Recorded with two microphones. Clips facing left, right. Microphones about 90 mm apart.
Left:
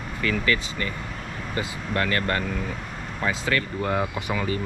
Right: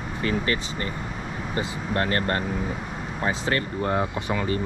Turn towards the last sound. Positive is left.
turn(degrees=-20)  # may be behind; listen again after turning